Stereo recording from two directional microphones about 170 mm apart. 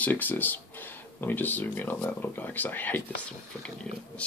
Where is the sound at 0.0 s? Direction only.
10° left (ahead or behind).